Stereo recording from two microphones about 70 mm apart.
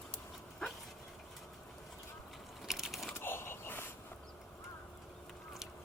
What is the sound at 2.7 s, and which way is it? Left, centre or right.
Mechanisms, centre.